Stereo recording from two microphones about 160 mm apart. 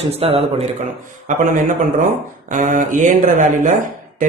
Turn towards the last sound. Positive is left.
turn(degrees=-50)  # may be behind; listen again after turning